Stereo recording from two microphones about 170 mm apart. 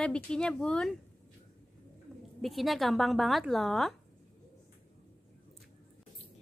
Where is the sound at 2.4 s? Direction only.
Centre (ahead or behind).